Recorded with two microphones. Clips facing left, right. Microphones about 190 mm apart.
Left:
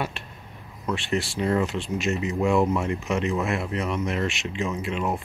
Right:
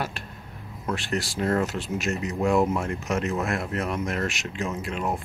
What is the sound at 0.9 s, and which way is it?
Speech, centre (ahead or behind).